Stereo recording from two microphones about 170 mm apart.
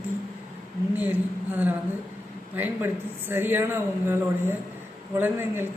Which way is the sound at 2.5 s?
10° right (ahead or behind).